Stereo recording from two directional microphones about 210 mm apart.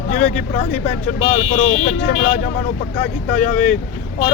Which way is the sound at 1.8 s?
35° left (ahead or behind).